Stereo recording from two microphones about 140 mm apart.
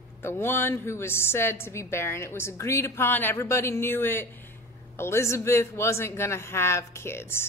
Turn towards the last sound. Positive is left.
turn(degrees=15)  # may be behind; listen again after turning